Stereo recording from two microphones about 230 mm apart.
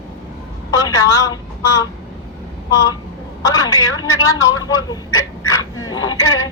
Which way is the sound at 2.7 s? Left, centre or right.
Centre.